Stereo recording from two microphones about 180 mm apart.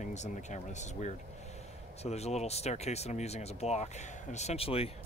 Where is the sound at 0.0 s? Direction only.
40° left (ahead or behind).